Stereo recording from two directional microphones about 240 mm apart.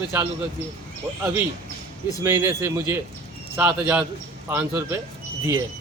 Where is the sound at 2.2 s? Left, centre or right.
Centre.